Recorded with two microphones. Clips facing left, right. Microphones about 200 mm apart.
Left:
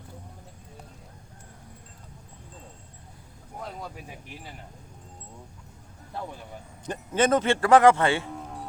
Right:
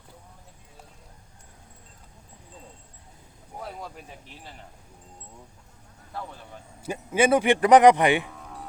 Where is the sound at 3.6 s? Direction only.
Centre (ahead or behind).